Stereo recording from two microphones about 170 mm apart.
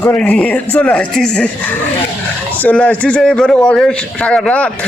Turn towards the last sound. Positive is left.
turn(degrees=5)  # may be behind; listen again after turning